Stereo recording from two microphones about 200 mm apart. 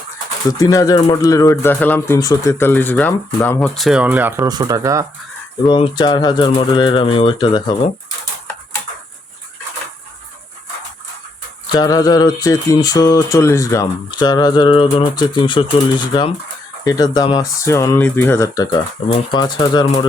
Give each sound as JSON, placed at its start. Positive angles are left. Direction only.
{"t": 0.6, "sound": "speech", "side_deg": 15}
{"t": 5.6, "sound": "speech", "side_deg": 25}
{"t": 11.7, "sound": "speech", "side_deg": 20}
{"t": 16.8, "sound": "speech", "side_deg": 20}